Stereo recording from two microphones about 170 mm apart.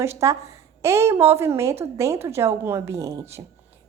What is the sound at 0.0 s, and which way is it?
A woman's voice, 15° right (ahead or behind).